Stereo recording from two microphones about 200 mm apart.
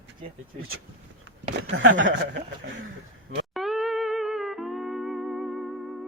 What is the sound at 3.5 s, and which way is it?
Music, centre (ahead or behind).